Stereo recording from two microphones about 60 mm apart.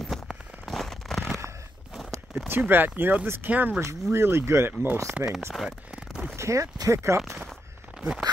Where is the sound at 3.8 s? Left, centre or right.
Right.